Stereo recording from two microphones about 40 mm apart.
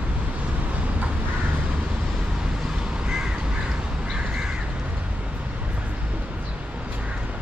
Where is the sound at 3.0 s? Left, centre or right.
Centre.